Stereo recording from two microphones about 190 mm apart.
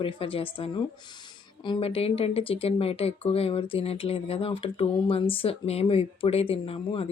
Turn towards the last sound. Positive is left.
turn(degrees=30)  # may be behind; listen again after turning